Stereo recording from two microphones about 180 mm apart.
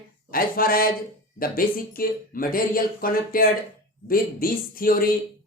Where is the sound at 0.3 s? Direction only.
55° left (ahead or behind).